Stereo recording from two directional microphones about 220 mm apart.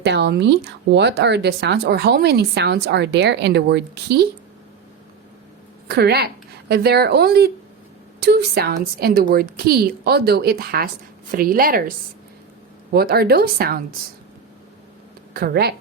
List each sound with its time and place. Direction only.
0.0 s speech: 50° right (ahead or behind)
5.9 s a woman's voice: 45° right (ahead or behind)
15.3 s speech: 45° right (ahead or behind)